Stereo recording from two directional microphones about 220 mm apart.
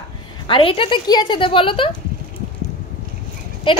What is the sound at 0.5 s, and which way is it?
A woman's voice, 25° left (ahead or behind).